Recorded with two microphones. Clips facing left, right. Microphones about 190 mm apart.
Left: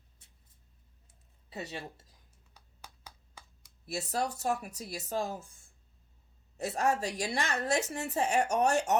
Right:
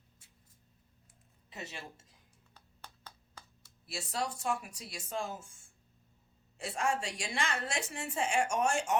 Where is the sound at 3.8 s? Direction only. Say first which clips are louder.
Left 4 dB; 40° left (ahead or behind).